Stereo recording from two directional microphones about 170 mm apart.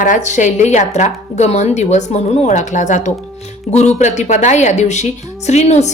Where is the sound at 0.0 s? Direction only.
45° left (ahead or behind).